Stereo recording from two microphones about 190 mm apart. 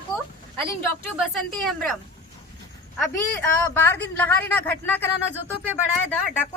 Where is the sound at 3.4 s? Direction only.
10° left (ahead or behind).